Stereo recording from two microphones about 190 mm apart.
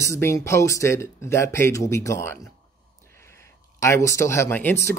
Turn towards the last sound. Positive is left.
turn(degrees=10)  # may be behind; listen again after turning